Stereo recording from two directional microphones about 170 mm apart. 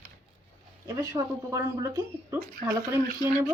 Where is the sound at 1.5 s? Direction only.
15° right (ahead or behind).